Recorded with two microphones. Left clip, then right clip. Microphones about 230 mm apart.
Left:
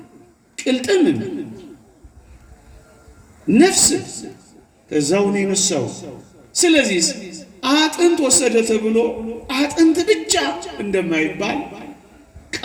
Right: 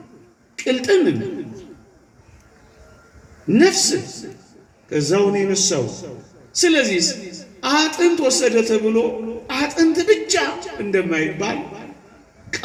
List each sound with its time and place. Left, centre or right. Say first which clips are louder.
0.5 s speech: right 1 dB; left
3.5 s a man's voice: left 1 dB; left
9.5 s a sound: left 2 dB; left